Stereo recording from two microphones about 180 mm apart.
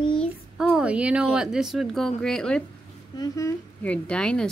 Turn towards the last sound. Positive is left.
turn(degrees=5)  # may be behind; listen again after turning